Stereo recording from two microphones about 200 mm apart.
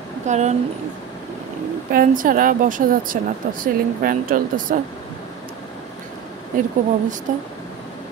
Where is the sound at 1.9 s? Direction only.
45° right (ahead or behind).